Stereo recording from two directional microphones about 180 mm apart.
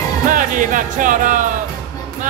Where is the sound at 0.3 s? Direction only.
50° right (ahead or behind).